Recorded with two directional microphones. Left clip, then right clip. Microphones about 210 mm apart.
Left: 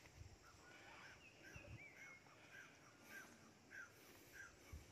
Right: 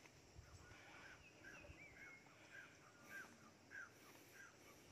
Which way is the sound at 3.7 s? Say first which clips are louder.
Right 1 dB; 50° left (ahead or behind).